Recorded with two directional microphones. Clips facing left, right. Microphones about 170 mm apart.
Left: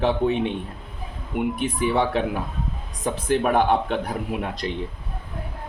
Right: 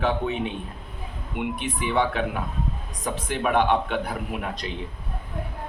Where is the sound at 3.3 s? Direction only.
40° left (ahead or behind).